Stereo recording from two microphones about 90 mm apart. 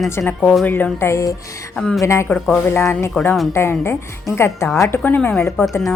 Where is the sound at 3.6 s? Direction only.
30° left (ahead or behind).